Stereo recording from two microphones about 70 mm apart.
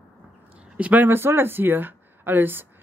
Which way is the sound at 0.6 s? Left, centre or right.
Centre.